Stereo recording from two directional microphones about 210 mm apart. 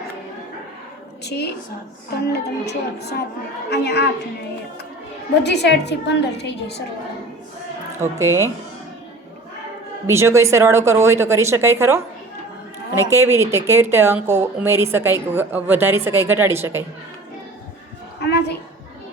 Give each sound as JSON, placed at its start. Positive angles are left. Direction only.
{"t": 1.2, "sound": "a woman's voice", "side_deg": 50}
{"t": 5.4, "sound": "a woman's voice", "side_deg": 55}
{"t": 8.0, "sound": "speech", "side_deg": -15}
{"t": 10.1, "sound": "speech", "side_deg": -10}
{"t": 13.1, "sound": "speech", "side_deg": -10}
{"t": 18.2, "sound": "a sound", "side_deg": 50}